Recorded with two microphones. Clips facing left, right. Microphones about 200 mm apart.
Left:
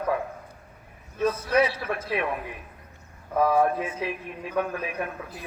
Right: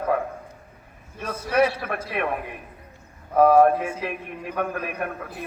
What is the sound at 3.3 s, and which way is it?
A man's voice, 60° right (ahead or behind).